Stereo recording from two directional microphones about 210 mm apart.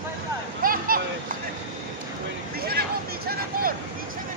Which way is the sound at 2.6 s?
45° right (ahead or behind).